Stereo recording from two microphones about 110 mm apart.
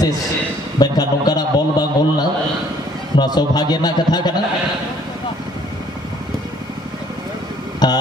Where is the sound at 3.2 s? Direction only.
40° left (ahead or behind).